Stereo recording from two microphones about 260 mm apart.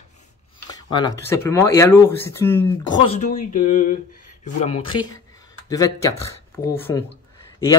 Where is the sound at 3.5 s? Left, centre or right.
Left.